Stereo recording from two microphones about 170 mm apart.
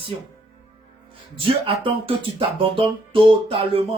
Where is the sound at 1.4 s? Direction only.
30° right (ahead or behind).